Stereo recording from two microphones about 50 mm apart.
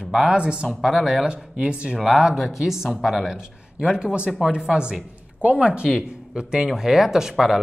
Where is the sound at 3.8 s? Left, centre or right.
Centre.